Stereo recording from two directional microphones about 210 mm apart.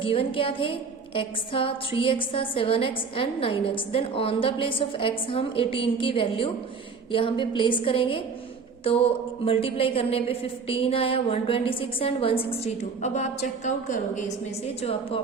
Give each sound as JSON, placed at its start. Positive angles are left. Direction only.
{"t": 0.0, "sound": "a woman's voice", "side_deg": 25}